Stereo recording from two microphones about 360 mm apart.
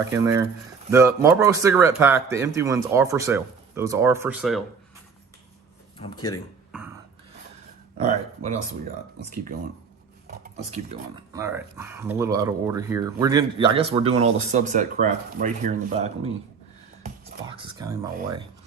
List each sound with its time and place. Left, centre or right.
0.0 s speech: centre
6.0 s speech: centre
6.7 s a sound: centre
8.0 s speech: centre
10.2 s speech: right
17.5 s speech: centre